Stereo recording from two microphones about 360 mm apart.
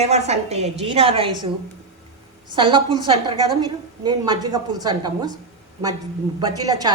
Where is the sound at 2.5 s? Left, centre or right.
Centre.